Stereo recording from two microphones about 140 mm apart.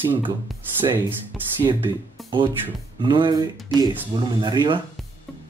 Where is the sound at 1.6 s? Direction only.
35° right (ahead or behind).